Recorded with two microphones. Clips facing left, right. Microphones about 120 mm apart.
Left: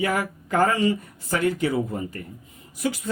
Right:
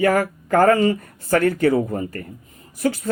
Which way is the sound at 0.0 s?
50° right (ahead or behind).